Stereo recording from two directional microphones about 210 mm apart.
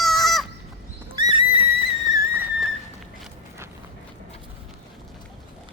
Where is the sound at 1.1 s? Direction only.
20° right (ahead or behind).